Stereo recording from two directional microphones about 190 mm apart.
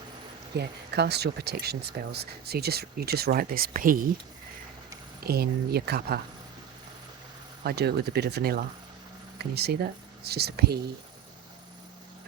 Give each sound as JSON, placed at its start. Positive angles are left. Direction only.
{"t": 0.5, "sound": "speech", "side_deg": -60}
{"t": 5.2, "sound": "speech", "side_deg": -55}
{"t": 7.6, "sound": "speech", "side_deg": -60}